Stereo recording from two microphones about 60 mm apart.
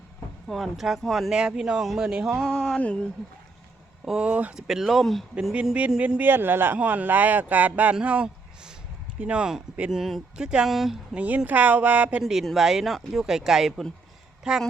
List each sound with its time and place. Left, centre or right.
0.4 s speech: centre
1.3 s speech: centre
2.3 s speech: centre
2.6 s a sound: centre
4.2 s speech: right
4.5 s speech: centre
5.3 s speech: centre
6.1 s speech: right; by 9.5 s centre
9.9 s speech: centre
11.1 s speech: right
12.2 s speech: centre